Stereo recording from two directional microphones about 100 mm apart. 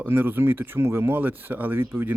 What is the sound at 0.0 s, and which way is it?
Speech, 20° right (ahead or behind).